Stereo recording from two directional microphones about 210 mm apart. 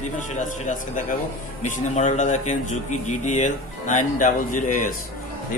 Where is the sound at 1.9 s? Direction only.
35° left (ahead or behind).